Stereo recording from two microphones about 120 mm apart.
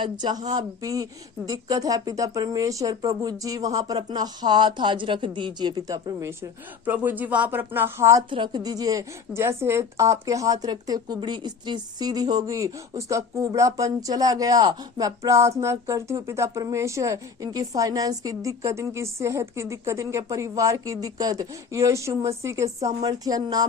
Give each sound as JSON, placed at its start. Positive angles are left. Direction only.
{"t": 0.0, "sound": "speech", "side_deg": -35}
{"t": 8.3, "sound": "a woman's voice", "side_deg": -40}